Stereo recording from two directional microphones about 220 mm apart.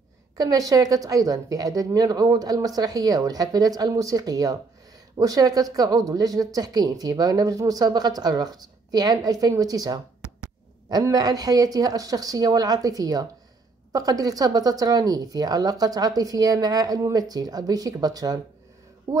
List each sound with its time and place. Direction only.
0.4 s speech: 15° right (ahead or behind)